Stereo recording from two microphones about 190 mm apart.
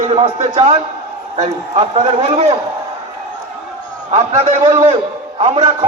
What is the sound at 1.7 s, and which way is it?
Speech, 30° right (ahead or behind).